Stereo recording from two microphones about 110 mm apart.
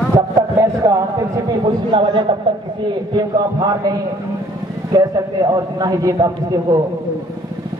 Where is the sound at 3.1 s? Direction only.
40° right (ahead or behind).